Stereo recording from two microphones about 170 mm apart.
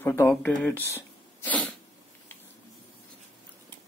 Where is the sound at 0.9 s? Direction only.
15° left (ahead or behind).